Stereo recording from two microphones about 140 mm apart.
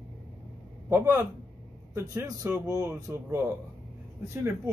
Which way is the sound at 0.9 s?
15° right (ahead or behind).